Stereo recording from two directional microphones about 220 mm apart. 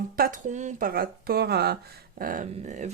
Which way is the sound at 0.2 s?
35° right (ahead or behind).